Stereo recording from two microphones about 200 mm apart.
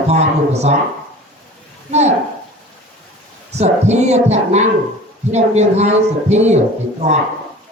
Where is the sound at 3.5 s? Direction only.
35° right (ahead or behind).